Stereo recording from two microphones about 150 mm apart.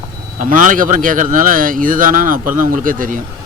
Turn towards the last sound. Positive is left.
turn(degrees=-65)  # may be behind; listen again after turning